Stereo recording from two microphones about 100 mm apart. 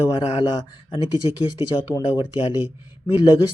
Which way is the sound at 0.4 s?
50° left (ahead or behind).